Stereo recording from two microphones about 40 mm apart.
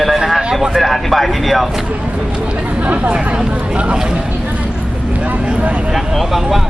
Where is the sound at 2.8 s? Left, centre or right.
Right.